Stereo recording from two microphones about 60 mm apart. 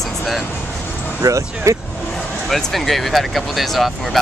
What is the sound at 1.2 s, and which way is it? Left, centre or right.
Speech, right.